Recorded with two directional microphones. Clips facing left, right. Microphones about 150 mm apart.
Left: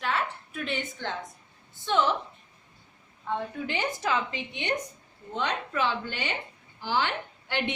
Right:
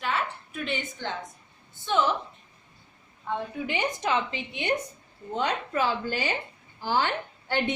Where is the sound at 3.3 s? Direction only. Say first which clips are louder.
Right 1 dB; 10° right (ahead or behind).